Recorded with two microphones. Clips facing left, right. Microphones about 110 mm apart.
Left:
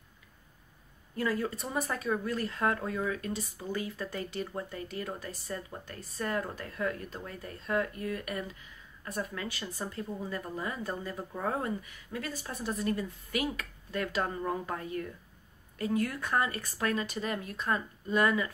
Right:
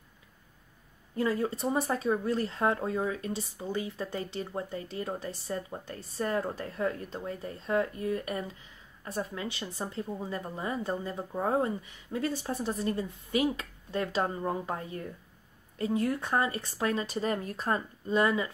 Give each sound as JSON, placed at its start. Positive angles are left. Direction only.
{"t": 1.1, "sound": "speech", "side_deg": -25}